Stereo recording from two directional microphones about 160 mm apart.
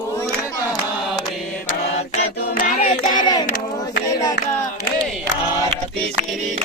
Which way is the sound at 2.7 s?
45° left (ahead or behind).